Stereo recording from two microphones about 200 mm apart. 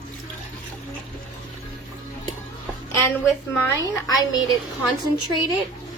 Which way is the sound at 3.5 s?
15° left (ahead or behind).